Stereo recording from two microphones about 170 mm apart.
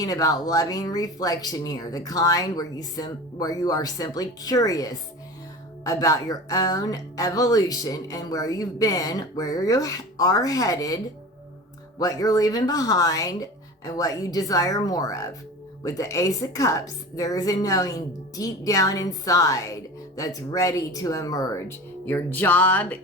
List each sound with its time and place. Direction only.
0.0 s a woman's voice: 20° left (ahead or behind)